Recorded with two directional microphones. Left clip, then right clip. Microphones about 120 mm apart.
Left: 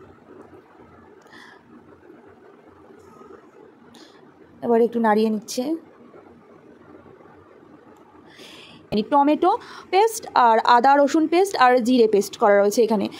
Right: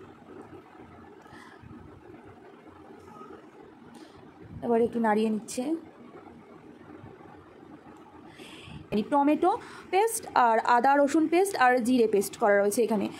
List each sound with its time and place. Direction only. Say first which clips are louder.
4.6 s a woman's voice: left 7 dB; 40° left (ahead or behind)
8.4 s a sound: left 5 dB; 45° left (ahead or behind)
8.9 s a woman's voice: left 7 dB; 30° left (ahead or behind)